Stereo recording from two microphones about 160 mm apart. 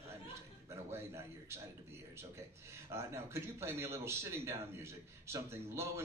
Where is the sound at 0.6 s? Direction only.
15° right (ahead or behind).